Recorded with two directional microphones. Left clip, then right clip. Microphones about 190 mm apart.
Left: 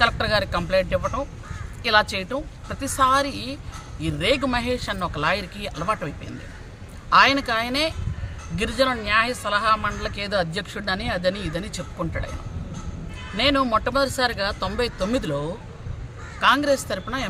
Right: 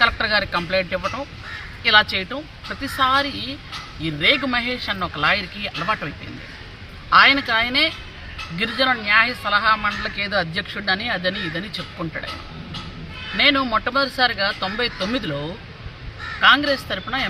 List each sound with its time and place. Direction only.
0.0 s speech: 30° left (ahead or behind)
7.1 s speech: 25° left (ahead or behind)
13.3 s speech: 25° left (ahead or behind)